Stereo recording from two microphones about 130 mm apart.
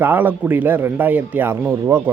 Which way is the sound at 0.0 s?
15° right (ahead or behind).